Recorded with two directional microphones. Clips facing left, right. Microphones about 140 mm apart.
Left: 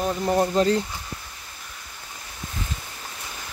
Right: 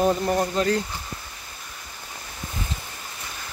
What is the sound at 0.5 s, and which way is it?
Speech, 25° left (ahead or behind).